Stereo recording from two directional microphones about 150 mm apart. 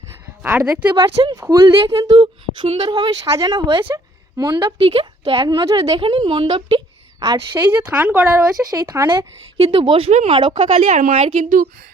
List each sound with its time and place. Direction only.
0.1 s a sound: 10° right (ahead or behind)
0.7 s speech: 10° right (ahead or behind)
0.9 s a woman's voice: 30° right (ahead or behind)
3.8 s a sound: 25° right (ahead or behind)
4.8 s a woman's voice: 40° right (ahead or behind)
5.4 s a woman's voice: 25° right (ahead or behind)
8.3 s a woman's voice: 25° right (ahead or behind)
10.1 s speech: 45° right (ahead or behind)